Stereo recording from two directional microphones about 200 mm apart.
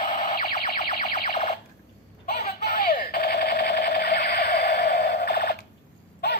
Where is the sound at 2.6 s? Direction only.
45° left (ahead or behind).